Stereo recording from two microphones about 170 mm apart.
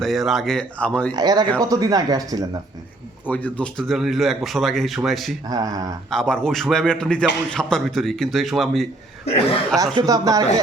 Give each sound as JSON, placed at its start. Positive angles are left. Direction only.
{"t": 0.0, "sound": "speech", "side_deg": 0}
{"t": 1.1, "sound": "speech", "side_deg": -25}
{"t": 3.2, "sound": "speech", "side_deg": 10}
{"t": 5.5, "sound": "speech", "side_deg": -20}
{"t": 6.1, "sound": "speech", "side_deg": 5}
{"t": 9.2, "sound": "speech", "side_deg": 35}
{"t": 9.7, "sound": "speech", "side_deg": -20}